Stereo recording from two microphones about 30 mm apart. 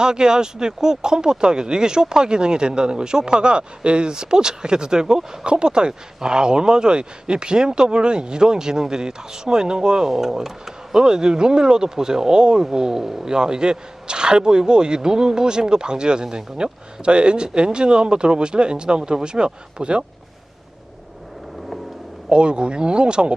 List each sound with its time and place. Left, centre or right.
0.0 s speech: right
5.5 s speech: right
10.1 s speech: centre; by 20.1 s right
22.3 s speech: right